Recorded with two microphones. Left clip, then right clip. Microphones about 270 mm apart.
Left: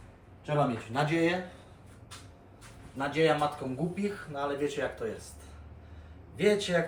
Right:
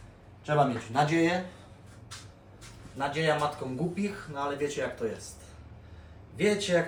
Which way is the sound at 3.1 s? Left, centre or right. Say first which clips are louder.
Left 2 dB; centre.